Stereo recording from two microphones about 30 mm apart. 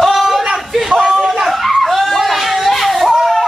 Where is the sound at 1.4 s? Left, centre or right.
Centre.